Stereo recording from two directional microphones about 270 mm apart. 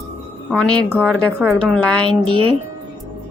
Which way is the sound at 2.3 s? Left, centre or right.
Centre.